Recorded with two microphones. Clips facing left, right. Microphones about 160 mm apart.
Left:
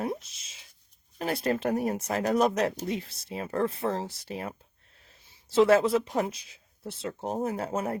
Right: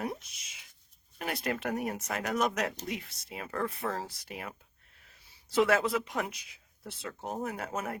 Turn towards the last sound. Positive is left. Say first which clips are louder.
# left 6 dB
turn(degrees=30)  # may be behind; listen again after turning